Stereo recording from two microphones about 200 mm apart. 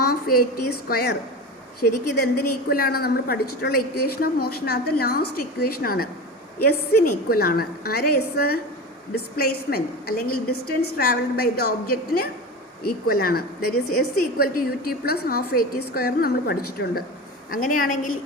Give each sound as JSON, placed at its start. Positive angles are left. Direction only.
{"t": 0.0, "sound": "a woman's voice", "side_deg": 50}
{"t": 10.2, "sound": "a woman's voice", "side_deg": 90}
{"t": 10.9, "sound": "a woman's voice", "side_deg": 50}
{"t": 13.1, "sound": "a woman's voice", "side_deg": 50}